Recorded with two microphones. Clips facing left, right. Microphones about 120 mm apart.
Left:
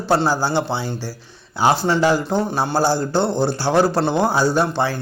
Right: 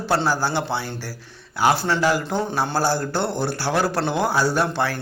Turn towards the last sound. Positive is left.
turn(degrees=15)  # may be behind; listen again after turning